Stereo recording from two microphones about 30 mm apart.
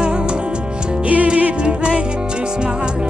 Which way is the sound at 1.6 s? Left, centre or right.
Right.